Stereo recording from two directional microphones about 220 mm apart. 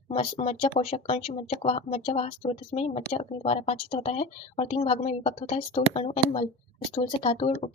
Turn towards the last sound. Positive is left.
turn(degrees=25)  # may be behind; listen again after turning